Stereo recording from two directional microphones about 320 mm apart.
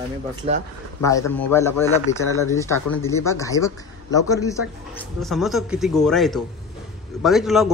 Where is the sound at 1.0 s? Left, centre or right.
Centre.